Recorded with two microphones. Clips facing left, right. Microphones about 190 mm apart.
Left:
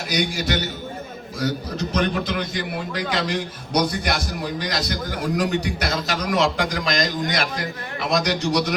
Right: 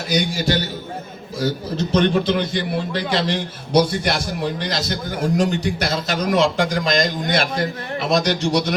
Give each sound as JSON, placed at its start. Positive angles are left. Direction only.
{"t": 0.1, "sound": "a man's voice", "side_deg": -30}